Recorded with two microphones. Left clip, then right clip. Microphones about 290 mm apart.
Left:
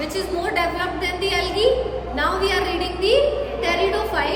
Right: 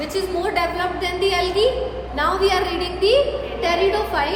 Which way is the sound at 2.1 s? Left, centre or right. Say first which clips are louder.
Right 2 dB; centre.